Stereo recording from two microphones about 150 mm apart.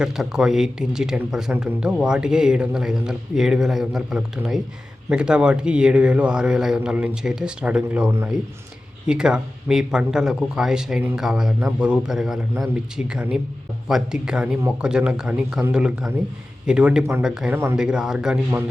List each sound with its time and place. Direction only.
0.0 s a man's voice: 5° right (ahead or behind)
17.0 s a man's voice: 15° right (ahead or behind)
17.2 s speech: 5° right (ahead or behind)